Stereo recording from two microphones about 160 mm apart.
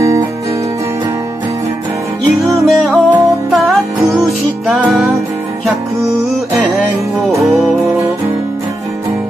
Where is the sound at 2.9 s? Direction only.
10° right (ahead or behind).